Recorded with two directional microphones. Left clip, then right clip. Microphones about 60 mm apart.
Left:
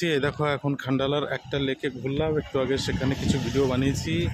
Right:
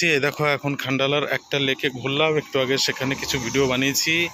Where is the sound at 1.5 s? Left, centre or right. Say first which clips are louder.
Right 6 dB; left.